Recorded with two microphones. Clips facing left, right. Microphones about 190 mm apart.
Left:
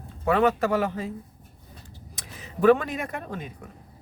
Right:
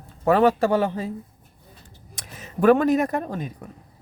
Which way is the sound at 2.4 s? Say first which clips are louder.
Right 2 dB; 45° right (ahead or behind).